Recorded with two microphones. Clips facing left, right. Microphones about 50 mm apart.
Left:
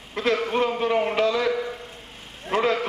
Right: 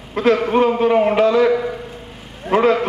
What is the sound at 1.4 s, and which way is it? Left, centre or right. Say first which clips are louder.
A man's voice: right 8 dB; right.